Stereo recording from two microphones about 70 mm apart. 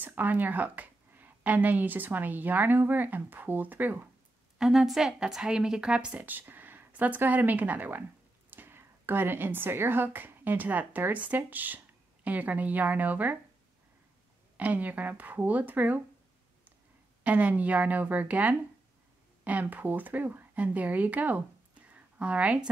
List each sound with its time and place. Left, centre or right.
0.0 s a woman's voice: right
4.6 s a woman's voice: centre
6.2 s speech: right
14.6 s speech: right
17.2 s speech: right
21.9 s a sound: centre